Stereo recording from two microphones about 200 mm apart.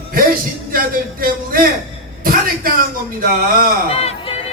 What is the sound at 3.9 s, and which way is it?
Speech, 30° left (ahead or behind).